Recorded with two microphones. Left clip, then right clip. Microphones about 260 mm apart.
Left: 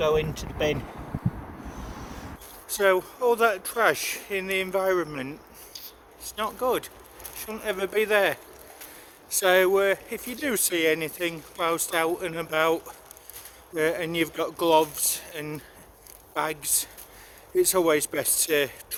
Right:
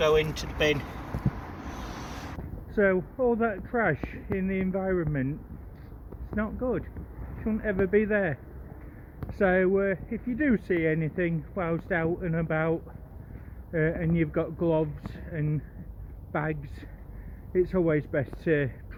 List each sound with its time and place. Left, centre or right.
0.1 s speech: centre
2.7 s speech: centre
6.3 s speech: left
9.4 s speech: left
17.6 s speech: centre